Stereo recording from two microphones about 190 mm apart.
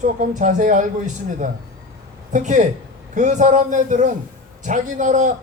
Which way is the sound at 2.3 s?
40° right (ahead or behind).